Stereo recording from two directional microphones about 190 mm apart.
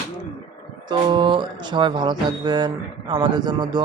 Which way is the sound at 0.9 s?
25° right (ahead or behind).